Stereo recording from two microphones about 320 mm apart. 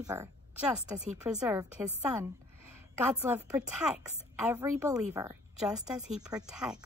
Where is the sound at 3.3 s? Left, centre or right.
Centre.